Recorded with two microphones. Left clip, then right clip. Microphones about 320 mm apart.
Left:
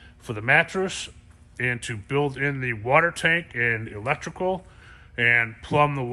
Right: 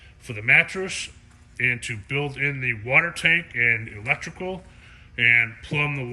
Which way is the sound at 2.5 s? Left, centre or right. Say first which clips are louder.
Even; left.